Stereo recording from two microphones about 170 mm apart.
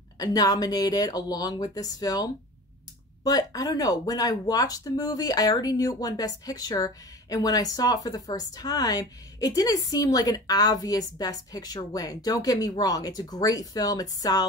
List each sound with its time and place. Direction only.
0.2 s speech: 20° left (ahead or behind)